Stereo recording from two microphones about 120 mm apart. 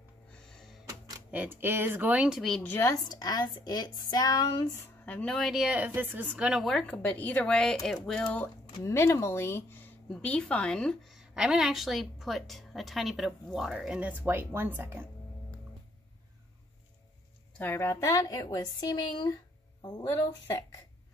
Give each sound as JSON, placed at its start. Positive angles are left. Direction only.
{"t": 0.3, "sound": "music", "side_deg": 5}
{"t": 1.3, "sound": "speech", "side_deg": -15}
{"t": 2.6, "sound": "speech", "side_deg": 20}
{"t": 3.1, "sound": "a woman's voice", "side_deg": 35}
{"t": 4.8, "sound": "a woman's voice", "side_deg": 10}
{"t": 6.7, "sound": "speech", "side_deg": 5}
{"t": 8.8, "sound": "a woman's voice", "side_deg": 20}
{"t": 17.6, "sound": "a woman's voice", "side_deg": 20}